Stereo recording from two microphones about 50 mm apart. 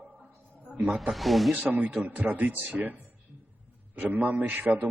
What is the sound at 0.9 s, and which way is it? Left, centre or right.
Speech, centre.